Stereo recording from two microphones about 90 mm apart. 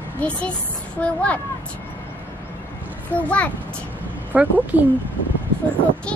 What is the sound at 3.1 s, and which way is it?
Speech, 15° left (ahead or behind).